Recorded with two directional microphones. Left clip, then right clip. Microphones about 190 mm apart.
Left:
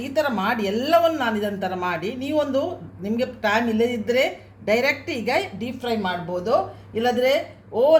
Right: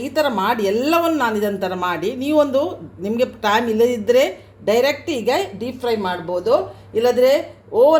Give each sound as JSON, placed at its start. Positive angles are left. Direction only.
{"t": 0.0, "sound": "a woman's voice", "side_deg": -35}